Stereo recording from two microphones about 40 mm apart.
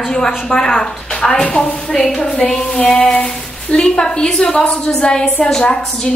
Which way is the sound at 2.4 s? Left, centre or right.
Centre.